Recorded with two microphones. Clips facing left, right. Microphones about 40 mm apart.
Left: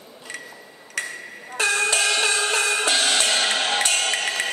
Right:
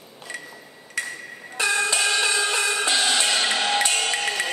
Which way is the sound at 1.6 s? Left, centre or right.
Left.